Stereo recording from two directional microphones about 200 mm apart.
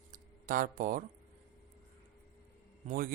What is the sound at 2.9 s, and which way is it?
Speech, 45° right (ahead or behind).